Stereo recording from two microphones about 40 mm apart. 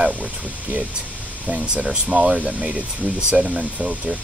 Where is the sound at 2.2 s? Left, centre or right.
Centre.